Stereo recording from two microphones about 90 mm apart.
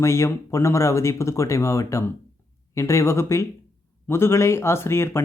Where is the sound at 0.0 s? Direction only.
30° left (ahead or behind).